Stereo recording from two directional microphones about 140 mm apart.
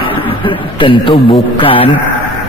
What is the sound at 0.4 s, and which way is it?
A man's voice, 35° left (ahead or behind).